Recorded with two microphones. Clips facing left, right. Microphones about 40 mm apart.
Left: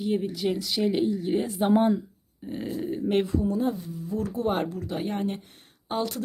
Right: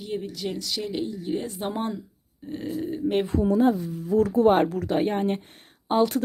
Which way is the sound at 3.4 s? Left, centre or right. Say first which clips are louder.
Right 6 dB; right.